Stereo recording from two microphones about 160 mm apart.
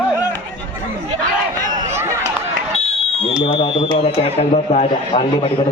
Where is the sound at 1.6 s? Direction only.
20° right (ahead or behind).